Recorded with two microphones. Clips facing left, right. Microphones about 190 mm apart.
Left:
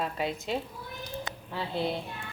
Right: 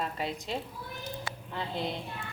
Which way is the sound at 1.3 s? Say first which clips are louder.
Even; 20° left (ahead or behind).